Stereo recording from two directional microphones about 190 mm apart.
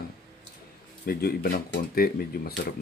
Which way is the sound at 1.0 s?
50° left (ahead or behind).